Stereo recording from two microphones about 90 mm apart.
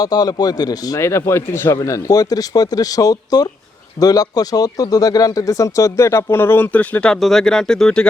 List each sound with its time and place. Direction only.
0.0 s speech: 45° left (ahead or behind)
0.9 s speech: 30° left (ahead or behind); by 8.0 s 5° left (ahead or behind)